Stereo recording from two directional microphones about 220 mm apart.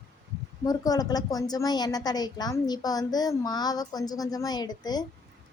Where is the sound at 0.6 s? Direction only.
15° left (ahead or behind).